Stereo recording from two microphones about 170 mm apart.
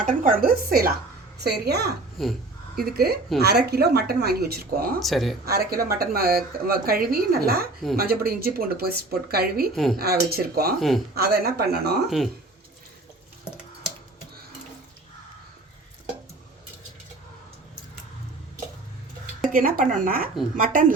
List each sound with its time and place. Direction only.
0.0 s a woman's voice: 50° right (ahead or behind)
1.4 s speech: 75° right (ahead or behind)
2.2 s speech: centre (ahead or behind)
2.7 s a woman's voice: 65° right (ahead or behind)
4.9 s speech: centre (ahead or behind)
5.5 s a woman's voice: 65° right (ahead or behind)
9.7 s speech: centre (ahead or behind)
10.0 s a woman's voice: 65° right (ahead or behind)
10.8 s speech: centre (ahead or behind)
11.1 s speech: 70° right (ahead or behind)
19.4 s a woman's voice: 55° right (ahead or behind)